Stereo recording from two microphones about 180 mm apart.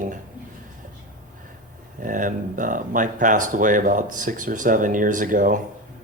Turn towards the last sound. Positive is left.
turn(degrees=-45)  # may be behind; listen again after turning